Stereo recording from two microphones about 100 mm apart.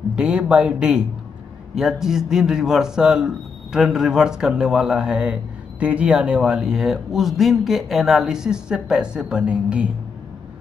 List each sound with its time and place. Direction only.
0.1 s a man's voice: 10° right (ahead or behind)